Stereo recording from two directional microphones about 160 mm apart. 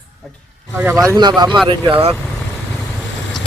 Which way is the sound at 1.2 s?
25° right (ahead or behind).